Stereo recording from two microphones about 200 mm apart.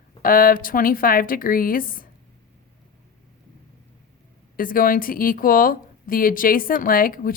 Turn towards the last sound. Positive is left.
turn(degrees=45)  # may be behind; listen again after turning